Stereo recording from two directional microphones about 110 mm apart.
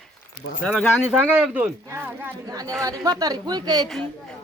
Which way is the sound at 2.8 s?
35° right (ahead or behind).